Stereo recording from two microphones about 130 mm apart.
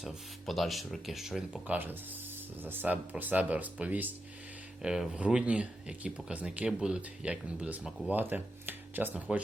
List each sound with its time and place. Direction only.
0.0 s speech: centre (ahead or behind)
1.6 s speech: 15° right (ahead or behind)